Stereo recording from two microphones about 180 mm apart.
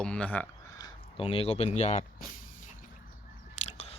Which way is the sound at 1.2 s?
35° left (ahead or behind).